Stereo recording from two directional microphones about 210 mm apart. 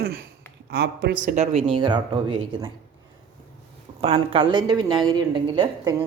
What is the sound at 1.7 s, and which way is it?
A woman's voice, 20° right (ahead or behind).